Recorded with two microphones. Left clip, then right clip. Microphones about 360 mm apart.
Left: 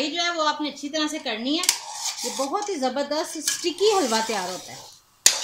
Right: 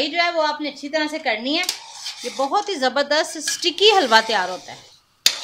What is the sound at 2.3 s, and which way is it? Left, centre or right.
Speech, right.